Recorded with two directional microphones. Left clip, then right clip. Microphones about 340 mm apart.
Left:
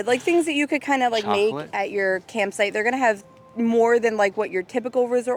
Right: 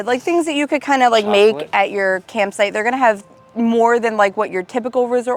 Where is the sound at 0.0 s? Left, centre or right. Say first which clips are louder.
Right 3 dB; centre.